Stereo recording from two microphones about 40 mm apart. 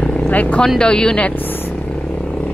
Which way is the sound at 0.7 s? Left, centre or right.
Left.